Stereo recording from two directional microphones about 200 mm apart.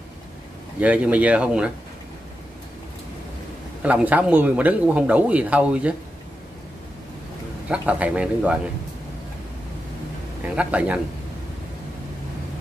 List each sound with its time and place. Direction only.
0.7 s a man's voice: 5° right (ahead or behind)
3.8 s a man's voice: 5° right (ahead or behind)
7.6 s a man's voice: 5° right (ahead or behind)
10.4 s a man's voice: 5° right (ahead or behind)